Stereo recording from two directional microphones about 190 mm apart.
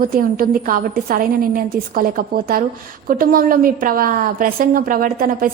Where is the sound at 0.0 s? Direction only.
50° right (ahead or behind).